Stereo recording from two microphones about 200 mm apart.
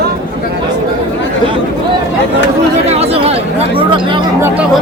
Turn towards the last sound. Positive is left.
turn(degrees=-25)  # may be behind; listen again after turning